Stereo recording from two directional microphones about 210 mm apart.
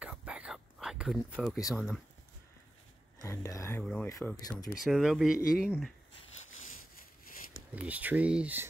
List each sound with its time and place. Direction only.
0.0 s whispering: 5° right (ahead or behind)
1.7 s speech: 5° right (ahead or behind)
3.2 s speech: 15° left (ahead or behind)
4.8 s speech: centre (ahead or behind)
7.7 s speech: 5° right (ahead or behind)